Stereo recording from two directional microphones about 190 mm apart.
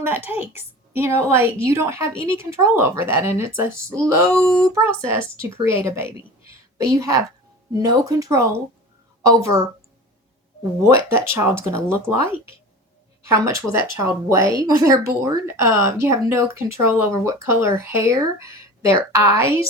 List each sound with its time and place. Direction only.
0.0 s speech: 10° right (ahead or behind)
4.4 s speech: 5° left (ahead or behind)
4.9 s speech: 15° right (ahead or behind)
10.8 s speech: 15° right (ahead or behind)